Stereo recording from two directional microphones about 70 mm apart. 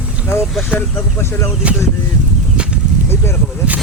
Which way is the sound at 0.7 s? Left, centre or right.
Centre.